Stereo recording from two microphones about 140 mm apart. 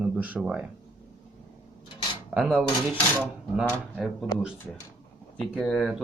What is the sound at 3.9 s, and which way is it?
Speech, centre (ahead or behind).